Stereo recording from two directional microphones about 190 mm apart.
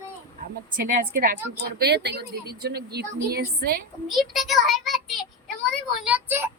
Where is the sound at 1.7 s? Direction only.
60° right (ahead or behind).